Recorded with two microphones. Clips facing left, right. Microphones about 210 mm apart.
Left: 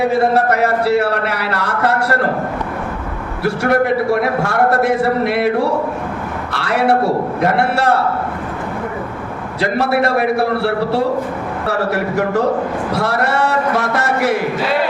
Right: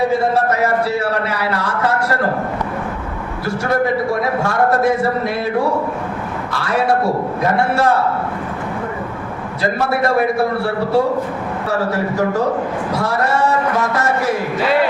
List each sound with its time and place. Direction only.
0.1 s speech: 65° left (ahead or behind)
3.4 s a man's voice: 65° left (ahead or behind)
9.6 s a man's voice: 70° left (ahead or behind)